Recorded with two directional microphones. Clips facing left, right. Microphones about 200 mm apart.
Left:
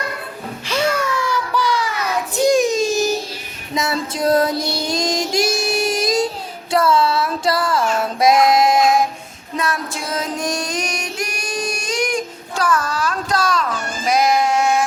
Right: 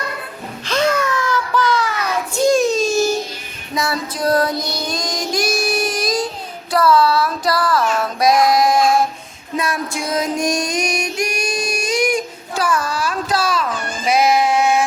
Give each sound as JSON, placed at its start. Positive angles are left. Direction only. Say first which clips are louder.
{"t": 0.6, "sound": "music", "louder": "right 2 dB", "side_deg": 10}
{"t": 2.3, "sound": "a sound", "louder": "even", "side_deg": 15}
{"t": 3.8, "sound": "child singing", "louder": "even", "side_deg": 25}
{"t": 6.7, "sound": "music", "louder": "right 2 dB", "side_deg": 25}
{"t": 9.6, "sound": "music", "louder": "right 1 dB", "side_deg": -10}
{"t": 14.1, "sound": "sheep", "louder": "right 1 dB", "side_deg": -5}